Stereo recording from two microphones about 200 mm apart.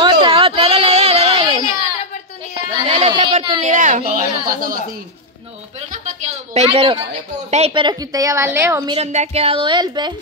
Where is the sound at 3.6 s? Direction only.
40° right (ahead or behind).